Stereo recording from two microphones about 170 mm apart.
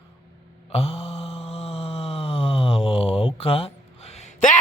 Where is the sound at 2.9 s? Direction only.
35° left (ahead or behind).